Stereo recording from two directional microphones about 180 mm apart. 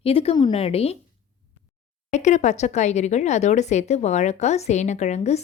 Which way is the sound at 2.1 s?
40° left (ahead or behind).